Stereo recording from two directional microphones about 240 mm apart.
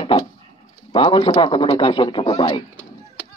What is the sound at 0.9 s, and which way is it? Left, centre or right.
A man's voice, left.